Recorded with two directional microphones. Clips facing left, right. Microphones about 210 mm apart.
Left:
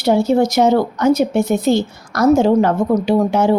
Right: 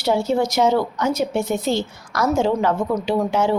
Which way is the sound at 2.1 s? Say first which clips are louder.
Left 8 dB; 40° left (ahead or behind).